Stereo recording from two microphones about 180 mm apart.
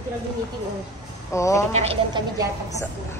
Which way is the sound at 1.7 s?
35° right (ahead or behind).